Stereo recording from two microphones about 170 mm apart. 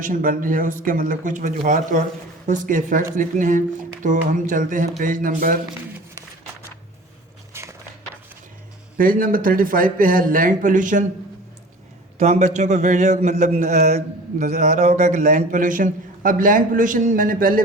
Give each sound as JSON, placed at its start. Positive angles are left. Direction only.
{"t": 0.0, "sound": "speech", "side_deg": -50}
{"t": 7.5, "sound": "a sound", "side_deg": -15}
{"t": 9.0, "sound": "speech", "side_deg": -55}
{"t": 12.2, "sound": "speech", "side_deg": -40}